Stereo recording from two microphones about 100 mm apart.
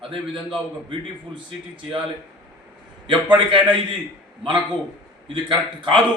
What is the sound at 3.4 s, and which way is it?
Speech, 60° right (ahead or behind).